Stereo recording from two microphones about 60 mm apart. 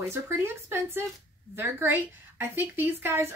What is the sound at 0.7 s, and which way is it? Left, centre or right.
A woman's voice, right.